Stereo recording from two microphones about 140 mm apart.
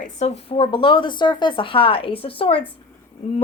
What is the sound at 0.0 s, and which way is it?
A woman's voice, 50° left (ahead or behind).